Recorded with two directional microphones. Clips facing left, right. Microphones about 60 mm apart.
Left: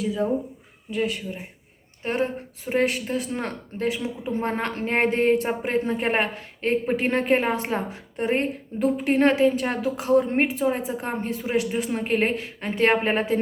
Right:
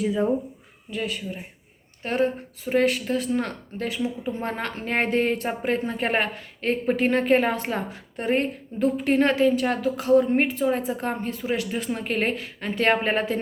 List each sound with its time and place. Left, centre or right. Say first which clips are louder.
0.9 s speech: left 4 dB; left
2.6 s a woman's voice: right 2 dB; left